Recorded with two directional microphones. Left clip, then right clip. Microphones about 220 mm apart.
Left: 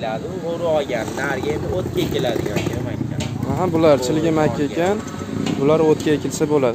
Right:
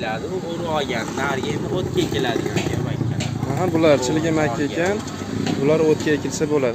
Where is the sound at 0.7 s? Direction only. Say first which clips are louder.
Left 4 dB; 50° right (ahead or behind).